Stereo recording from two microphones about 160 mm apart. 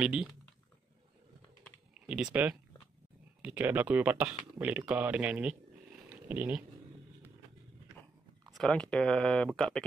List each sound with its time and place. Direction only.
0.0 s speech: 5° right (ahead or behind)
2.0 s speech: 5° right (ahead or behind)
6.0 s a sound: 10° right (ahead or behind)
8.5 s speech: centre (ahead or behind)